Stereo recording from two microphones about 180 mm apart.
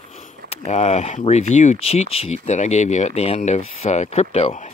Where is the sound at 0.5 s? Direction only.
35° left (ahead or behind).